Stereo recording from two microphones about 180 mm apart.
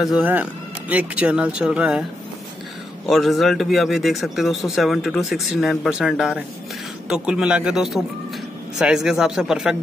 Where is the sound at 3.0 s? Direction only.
Centre (ahead or behind).